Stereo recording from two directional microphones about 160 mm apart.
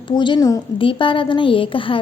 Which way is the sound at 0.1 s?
30° left (ahead or behind).